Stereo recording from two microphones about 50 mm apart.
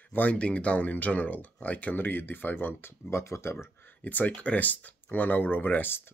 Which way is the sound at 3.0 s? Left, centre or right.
Left.